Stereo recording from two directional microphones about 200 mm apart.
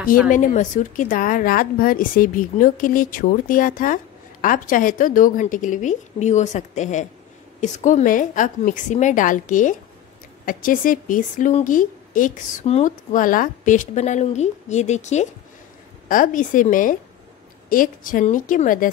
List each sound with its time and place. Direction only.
0.3 s a woman's voice: 40° left (ahead or behind)